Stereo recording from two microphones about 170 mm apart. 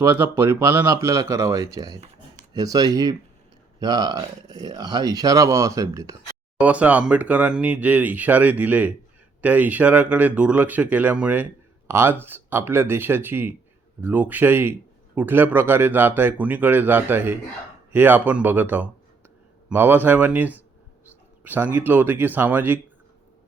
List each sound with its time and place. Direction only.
0.0 s speech: 15° right (ahead or behind)
6.6 s speech: 10° right (ahead or behind)